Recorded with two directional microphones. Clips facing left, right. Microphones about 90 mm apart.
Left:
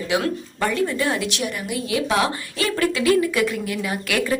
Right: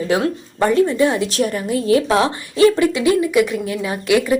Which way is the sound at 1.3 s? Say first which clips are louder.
Right 7 dB; 40° right (ahead or behind).